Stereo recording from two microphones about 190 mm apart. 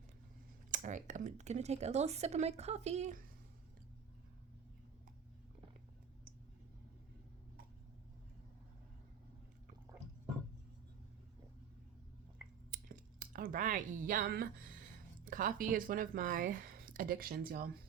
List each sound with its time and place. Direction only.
0.7 s speech: 40° right (ahead or behind)
12.7 s speech: 45° right (ahead or behind)